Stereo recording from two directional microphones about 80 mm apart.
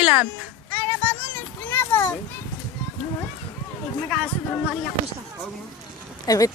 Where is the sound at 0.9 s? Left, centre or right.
Centre.